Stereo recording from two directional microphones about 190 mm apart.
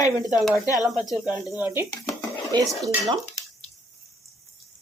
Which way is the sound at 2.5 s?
25° right (ahead or behind).